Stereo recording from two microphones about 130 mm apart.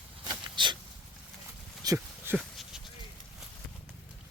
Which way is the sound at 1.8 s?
25° right (ahead or behind).